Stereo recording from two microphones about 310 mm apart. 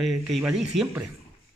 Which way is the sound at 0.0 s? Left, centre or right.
Centre.